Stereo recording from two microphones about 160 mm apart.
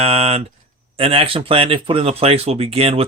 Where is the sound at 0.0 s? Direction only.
40° right (ahead or behind).